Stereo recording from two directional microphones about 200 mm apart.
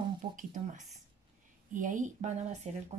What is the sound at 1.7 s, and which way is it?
Speech, 40° right (ahead or behind).